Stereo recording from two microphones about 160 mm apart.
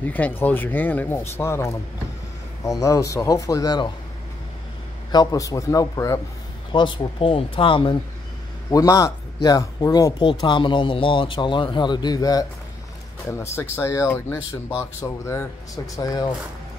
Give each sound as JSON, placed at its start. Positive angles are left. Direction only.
{"t": 0.0, "sound": "speech", "side_deg": 10}
{"t": 5.1, "sound": "speech", "side_deg": 25}
{"t": 6.7, "sound": "speech", "side_deg": 30}
{"t": 8.6, "sound": "speech", "side_deg": 20}